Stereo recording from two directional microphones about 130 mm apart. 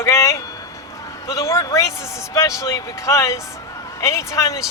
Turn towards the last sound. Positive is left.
turn(degrees=25)  # may be behind; listen again after turning